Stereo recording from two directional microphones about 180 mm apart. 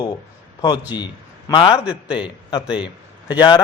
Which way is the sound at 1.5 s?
30° left (ahead or behind).